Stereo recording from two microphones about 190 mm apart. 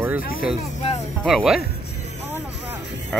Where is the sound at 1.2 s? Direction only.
Centre (ahead or behind).